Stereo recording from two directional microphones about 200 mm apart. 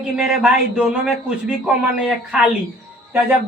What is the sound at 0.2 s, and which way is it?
Speech, 5° right (ahead or behind).